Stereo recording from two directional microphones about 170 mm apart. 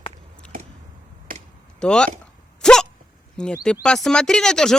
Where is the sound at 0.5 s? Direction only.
55° right (ahead or behind).